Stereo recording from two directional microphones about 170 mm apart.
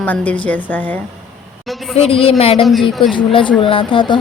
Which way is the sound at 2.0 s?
35° left (ahead or behind).